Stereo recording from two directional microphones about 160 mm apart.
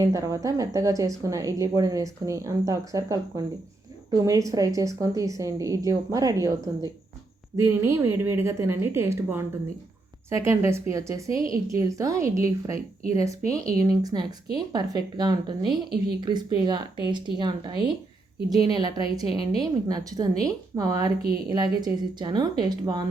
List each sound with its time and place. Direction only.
0.0 s a woman's voice: 20° right (ahead or behind)
11.3 s a woman's voice: 35° left (ahead or behind)
11.7 s speech: 20° right (ahead or behind)
21.2 s speech: 70° right (ahead or behind)
21.5 s speech: 25° right (ahead or behind)